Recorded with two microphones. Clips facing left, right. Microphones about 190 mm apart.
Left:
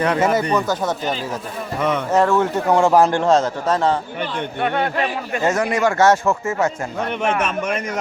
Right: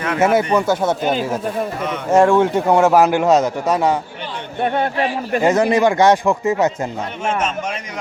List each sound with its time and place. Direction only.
0.2 s a man's voice: 10° right (ahead or behind)
2.1 s a man's voice: 15° right (ahead or behind)
5.4 s a man's voice: 15° right (ahead or behind)
7.3 s a man's voice: 60° left (ahead or behind)